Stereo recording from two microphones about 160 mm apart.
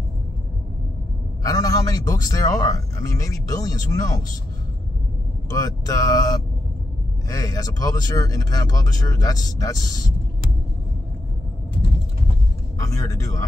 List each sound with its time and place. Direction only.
1.4 s a man's voice: 20° left (ahead or behind)
5.5 s a man's voice: 20° left (ahead or behind)
12.7 s a man's voice: 20° left (ahead or behind)